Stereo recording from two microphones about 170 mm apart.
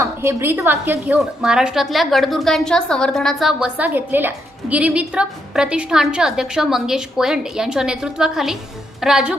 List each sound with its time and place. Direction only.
0.0 s a woman's voice: 15° right (ahead or behind)